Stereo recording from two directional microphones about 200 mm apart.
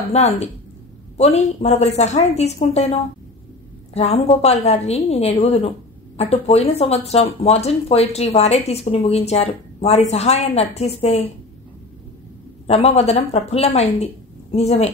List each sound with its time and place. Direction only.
0.2 s speech: 35° left (ahead or behind)
3.9 s speech: 30° left (ahead or behind)
12.6 s speech: 30° left (ahead or behind)